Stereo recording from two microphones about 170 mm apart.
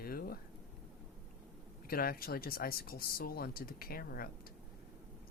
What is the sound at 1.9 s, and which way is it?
Speech, 60° left (ahead or behind).